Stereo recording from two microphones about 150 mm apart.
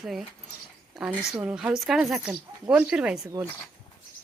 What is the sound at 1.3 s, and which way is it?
A woman's voice, 5° right (ahead or behind).